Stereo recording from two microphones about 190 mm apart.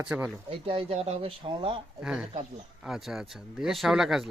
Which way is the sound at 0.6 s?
30° right (ahead or behind).